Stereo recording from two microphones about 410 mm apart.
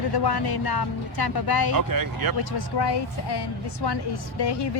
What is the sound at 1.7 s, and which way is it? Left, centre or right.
Speech, right.